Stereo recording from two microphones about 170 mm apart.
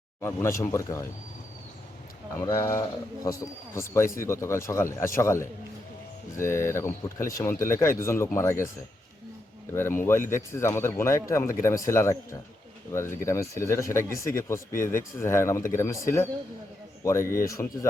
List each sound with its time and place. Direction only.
0.2 s speech: 15° left (ahead or behind)
2.3 s speech: 15° left (ahead or behind)
10.0 s speech: 15° left (ahead or behind)